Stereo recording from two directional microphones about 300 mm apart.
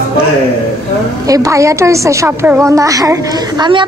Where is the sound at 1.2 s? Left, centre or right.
Centre.